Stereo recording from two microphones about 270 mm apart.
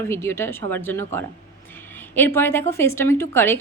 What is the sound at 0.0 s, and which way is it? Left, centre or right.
A woman's voice, centre.